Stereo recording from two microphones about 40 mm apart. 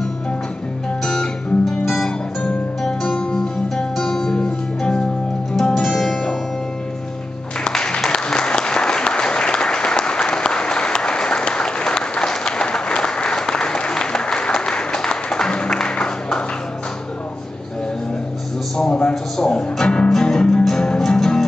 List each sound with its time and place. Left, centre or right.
1.0 s music: centre
3.9 s music: centre
4.4 s music: left
5.8 s music: centre
7.7 s applause: left
18.8 s a sound: left
19.3 s music: centre